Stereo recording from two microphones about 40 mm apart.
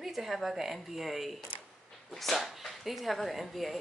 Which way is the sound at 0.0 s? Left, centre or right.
Centre.